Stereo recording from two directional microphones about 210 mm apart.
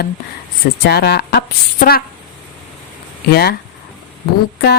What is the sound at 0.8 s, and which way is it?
Speech, 50° left (ahead or behind).